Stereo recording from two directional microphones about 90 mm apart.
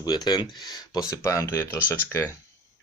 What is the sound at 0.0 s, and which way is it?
Speech, 45° left (ahead or behind).